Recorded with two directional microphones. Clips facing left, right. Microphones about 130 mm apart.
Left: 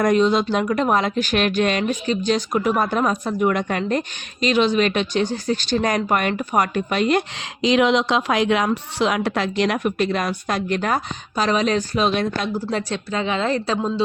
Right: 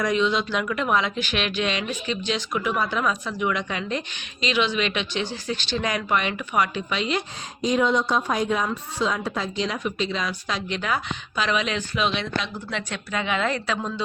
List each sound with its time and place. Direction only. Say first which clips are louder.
0.0 s speech: left 6 dB; 45° left (ahead or behind)
7.3 s speech: left 5 dB; 90° left; by 14.0 s 30° left (ahead or behind)